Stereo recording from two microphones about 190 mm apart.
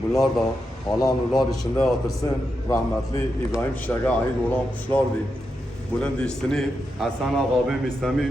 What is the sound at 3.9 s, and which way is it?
Speech, 10° left (ahead or behind).